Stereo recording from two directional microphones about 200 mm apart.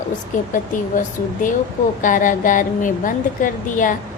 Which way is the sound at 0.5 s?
40° left (ahead or behind).